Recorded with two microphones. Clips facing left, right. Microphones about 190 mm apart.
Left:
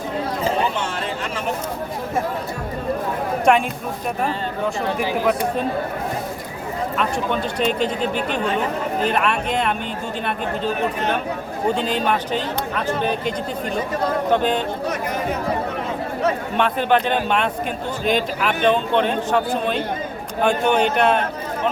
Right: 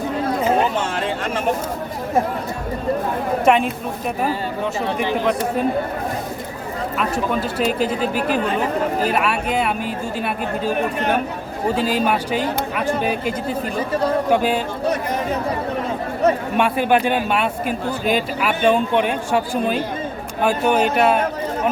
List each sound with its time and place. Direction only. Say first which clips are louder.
3.4 s speech: right 1 dB; centre (ahead or behind)
4.9 s speech: right 1 dB; 5° left (ahead or behind)
7.0 s a man's voice: right 2 dB; 5° right (ahead or behind)
16.6 s a man's voice: left 2 dB; 10° right (ahead or behind)